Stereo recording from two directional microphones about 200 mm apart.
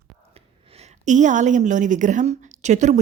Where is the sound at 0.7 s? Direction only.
35° right (ahead or behind).